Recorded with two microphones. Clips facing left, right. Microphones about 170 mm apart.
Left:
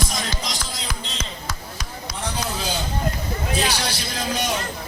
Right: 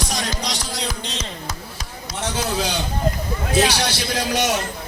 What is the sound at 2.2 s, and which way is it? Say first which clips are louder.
A man's voice: right 4 dB; 75° right (ahead or behind).